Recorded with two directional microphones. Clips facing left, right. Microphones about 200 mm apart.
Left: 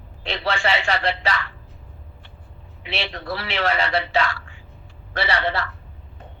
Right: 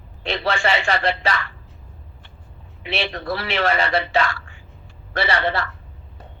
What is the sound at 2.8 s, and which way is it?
A man's voice, 50° right (ahead or behind).